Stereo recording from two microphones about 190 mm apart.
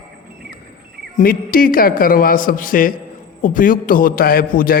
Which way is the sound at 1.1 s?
50° left (ahead or behind).